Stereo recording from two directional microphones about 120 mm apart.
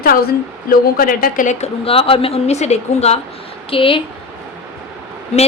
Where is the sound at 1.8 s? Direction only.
50° left (ahead or behind).